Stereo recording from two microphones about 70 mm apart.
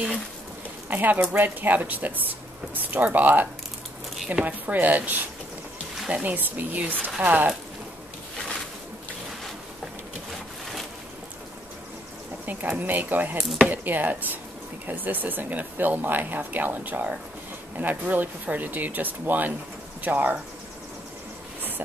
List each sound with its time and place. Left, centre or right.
0.8 s speech: right
4.5 s speech: right
6.2 s speech: right
12.4 s speech: right
13.4 s speech: centre
13.7 s speech: right